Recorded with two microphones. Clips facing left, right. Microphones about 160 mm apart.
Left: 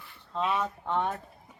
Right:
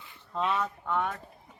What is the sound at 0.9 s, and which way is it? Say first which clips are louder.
Speech: left 1 dB; 30° left (ahead or behind).